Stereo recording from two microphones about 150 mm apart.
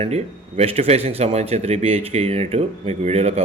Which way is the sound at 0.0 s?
45° right (ahead or behind).